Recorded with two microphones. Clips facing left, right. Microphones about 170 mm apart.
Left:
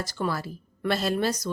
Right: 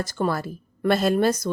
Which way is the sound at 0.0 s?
50° right (ahead or behind).